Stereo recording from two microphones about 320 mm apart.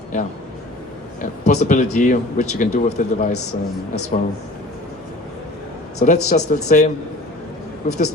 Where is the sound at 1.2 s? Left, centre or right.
Left.